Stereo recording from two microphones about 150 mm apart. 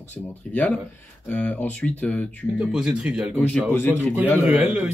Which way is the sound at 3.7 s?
15° left (ahead or behind).